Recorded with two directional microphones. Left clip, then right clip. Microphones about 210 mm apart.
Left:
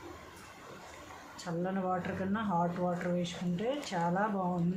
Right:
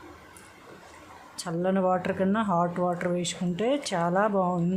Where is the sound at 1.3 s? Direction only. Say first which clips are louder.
Right 9 dB; 55° right (ahead or behind).